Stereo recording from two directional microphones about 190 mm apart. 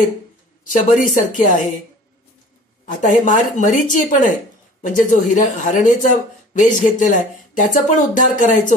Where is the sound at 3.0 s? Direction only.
40° left (ahead or behind).